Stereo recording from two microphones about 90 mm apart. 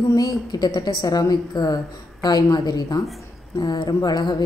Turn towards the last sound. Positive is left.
turn(degrees=55)  # may be behind; listen again after turning